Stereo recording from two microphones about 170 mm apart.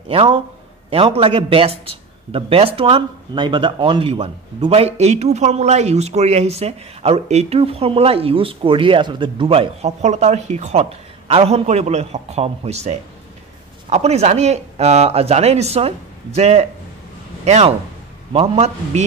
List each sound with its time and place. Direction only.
0.1 s speech: 30° right (ahead or behind)